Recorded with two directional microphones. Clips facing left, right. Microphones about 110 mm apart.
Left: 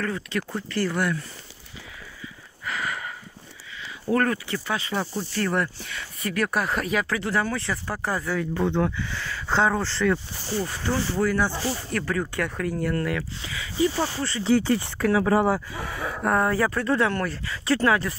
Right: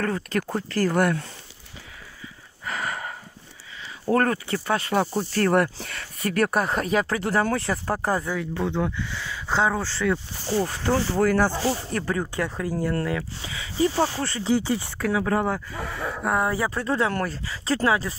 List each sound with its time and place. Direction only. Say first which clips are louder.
0.0 s speech: right 3 dB; 45° right (ahead or behind)
2.6 s a sound: right 1 dB; 40° right (ahead or behind)
4.1 s speech: right 2 dB; 35° right (ahead or behind)
8.4 s speech: left 2 dB; 5° right (ahead or behind)
10.5 s speech: right 4 dB; 45° right (ahead or behind)
11.7 s speech: right 1 dB; 25° right (ahead or behind)
14.5 s speech: left 3 dB; 10° right (ahead or behind)
16.3 s speech: left 2 dB; 15° right (ahead or behind)
17.1 s speech: even; 35° right (ahead or behind)